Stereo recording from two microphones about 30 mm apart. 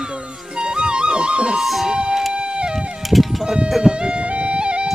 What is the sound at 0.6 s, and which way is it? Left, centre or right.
Music, right.